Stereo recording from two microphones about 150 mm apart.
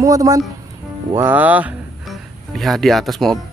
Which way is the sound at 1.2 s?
10° right (ahead or behind).